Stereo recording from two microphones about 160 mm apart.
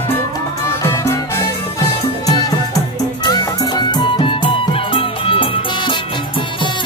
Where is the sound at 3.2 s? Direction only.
25° left (ahead or behind).